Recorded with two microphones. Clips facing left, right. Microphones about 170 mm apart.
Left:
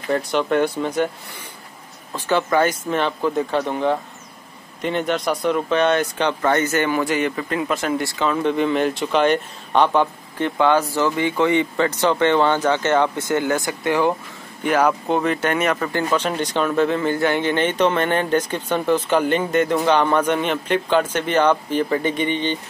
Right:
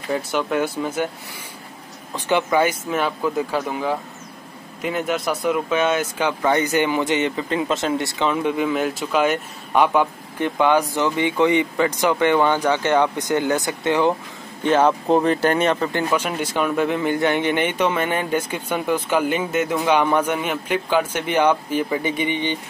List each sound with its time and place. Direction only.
0.1 s speech: 5° right (ahead or behind)
2.1 s speech: 15° right (ahead or behind)
8.5 s speech: 5° right (ahead or behind)